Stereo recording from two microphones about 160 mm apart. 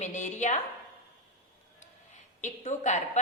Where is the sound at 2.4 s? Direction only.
50° left (ahead or behind).